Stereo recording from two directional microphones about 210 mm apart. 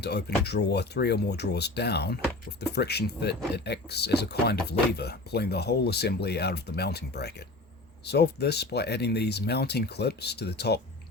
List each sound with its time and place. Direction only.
0.0 s speech: 50° left (ahead or behind)